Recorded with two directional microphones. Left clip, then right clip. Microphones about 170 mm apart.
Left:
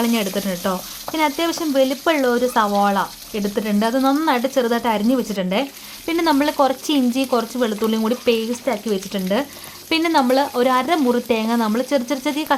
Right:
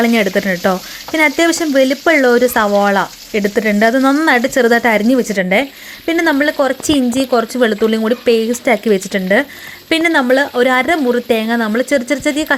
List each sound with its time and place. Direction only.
0.0 s frying: 20° right (ahead or behind)
6.1 s speech: 10° right (ahead or behind)
8.6 s frying: 25° right (ahead or behind)
9.9 s speech: 10° right (ahead or behind)